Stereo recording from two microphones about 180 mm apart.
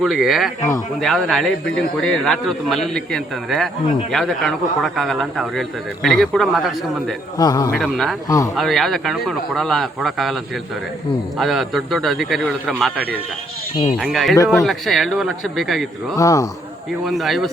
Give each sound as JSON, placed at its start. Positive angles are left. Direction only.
{"t": 0.0, "sound": "a man's voice", "side_deg": 0}
{"t": 7.3, "sound": "a man's voice", "side_deg": 20}
{"t": 7.8, "sound": "a man's voice", "side_deg": 0}
{"t": 8.3, "sound": "a man's voice", "side_deg": 20}
{"t": 8.5, "sound": "a man's voice", "side_deg": 0}
{"t": 16.1, "sound": "speech", "side_deg": 20}
{"t": 17.1, "sound": "a man's voice", "side_deg": 0}